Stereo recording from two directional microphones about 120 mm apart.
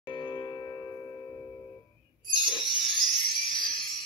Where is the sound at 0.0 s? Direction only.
40° left (ahead or behind).